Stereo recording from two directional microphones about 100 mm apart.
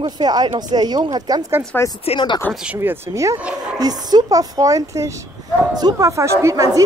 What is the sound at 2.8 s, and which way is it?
Speech, 30° right (ahead or behind).